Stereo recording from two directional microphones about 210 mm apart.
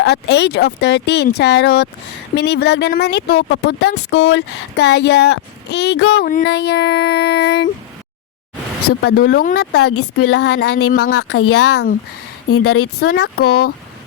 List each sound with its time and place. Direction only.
0.0 s speech: 55° left (ahead or behind)
3.8 s speech: 70° left (ahead or behind); by 7.7 s 50° left (ahead or behind)
9.0 s speech: 45° left (ahead or behind)
9.8 s speech: 90° left
13.0 s speech: 50° left (ahead or behind)